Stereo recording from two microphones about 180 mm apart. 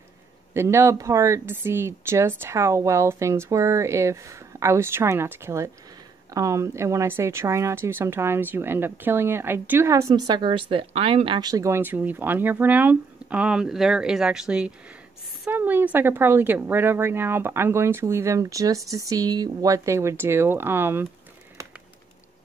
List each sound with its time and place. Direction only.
0.6 s speech: 15° right (ahead or behind)